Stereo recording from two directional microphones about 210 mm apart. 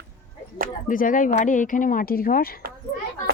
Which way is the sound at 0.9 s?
40° left (ahead or behind).